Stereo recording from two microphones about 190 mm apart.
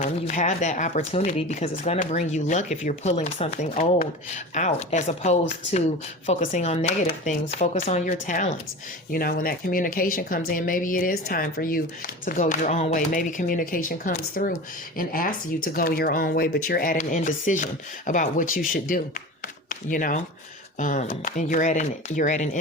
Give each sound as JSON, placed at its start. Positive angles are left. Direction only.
{"t": 0.0, "sound": "speech", "side_deg": 40}